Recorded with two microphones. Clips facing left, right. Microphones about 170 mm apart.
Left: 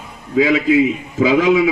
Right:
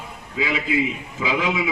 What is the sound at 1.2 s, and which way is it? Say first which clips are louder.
Speech: left 11 dB; 45° left (ahead or behind).